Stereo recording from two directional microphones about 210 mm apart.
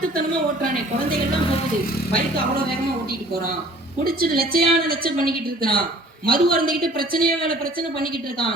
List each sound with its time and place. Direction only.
4.0 s a woman's voice: 45° right (ahead or behind)